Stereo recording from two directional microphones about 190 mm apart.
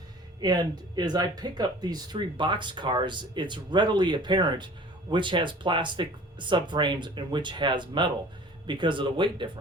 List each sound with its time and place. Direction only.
0.3 s speech: 20° right (ahead or behind)